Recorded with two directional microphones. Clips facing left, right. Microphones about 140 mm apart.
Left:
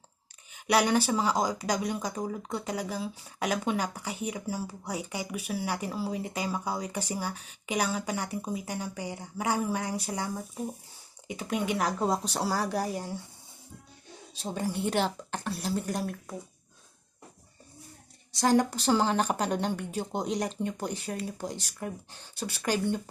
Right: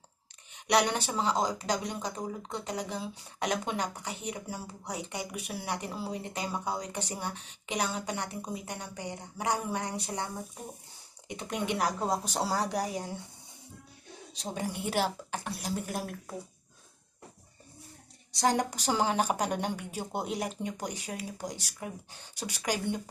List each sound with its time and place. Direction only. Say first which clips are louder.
0.7 s a woman's voice: left 3 dB; 5° left (ahead or behind)
11.3 s a woman's voice: left 3 dB; 5° left (ahead or behind)
12.2 s a woman's voice: left 1 dB; 15° right (ahead or behind)
14.5 s a woman's voice: left 3 dB; 15° right (ahead or behind)
18.3 s a woman's voice: left 4 dB; 20° right (ahead or behind)